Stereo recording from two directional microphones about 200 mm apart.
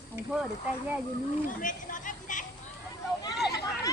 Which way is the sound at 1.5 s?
40° left (ahead or behind).